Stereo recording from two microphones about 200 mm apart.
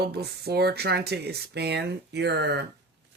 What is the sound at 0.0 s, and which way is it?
Speech, 55° right (ahead or behind).